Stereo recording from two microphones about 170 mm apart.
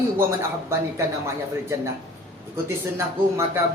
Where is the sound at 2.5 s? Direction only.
15° right (ahead or behind).